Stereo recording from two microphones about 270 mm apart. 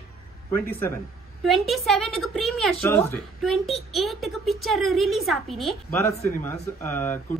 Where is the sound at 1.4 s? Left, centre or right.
Centre.